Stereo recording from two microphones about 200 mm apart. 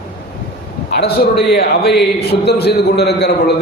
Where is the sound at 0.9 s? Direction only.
55° left (ahead or behind).